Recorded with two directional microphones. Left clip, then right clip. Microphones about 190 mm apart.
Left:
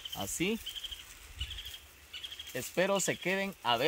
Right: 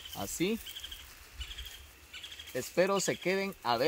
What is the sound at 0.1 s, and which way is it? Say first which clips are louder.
Speech: right 1 dB; 65° left (ahead or behind).